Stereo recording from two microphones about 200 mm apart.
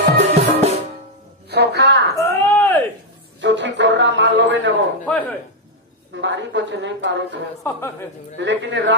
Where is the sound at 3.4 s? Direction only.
65° right (ahead or behind).